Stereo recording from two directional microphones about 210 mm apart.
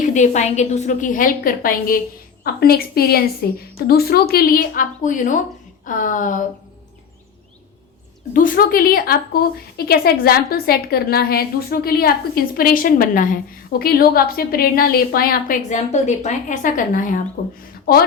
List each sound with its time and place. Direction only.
0.0 s a woman's voice: 35° left (ahead or behind)
8.3 s speech: 40° left (ahead or behind)